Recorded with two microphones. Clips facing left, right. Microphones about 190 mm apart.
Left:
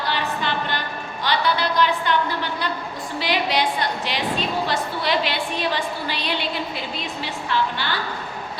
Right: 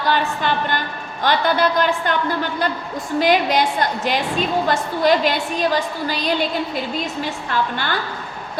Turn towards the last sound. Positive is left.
turn(degrees=-50)  # may be behind; listen again after turning